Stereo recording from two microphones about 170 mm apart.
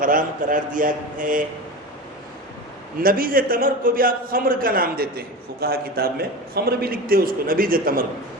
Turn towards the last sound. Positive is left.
turn(degrees=-55)  # may be behind; listen again after turning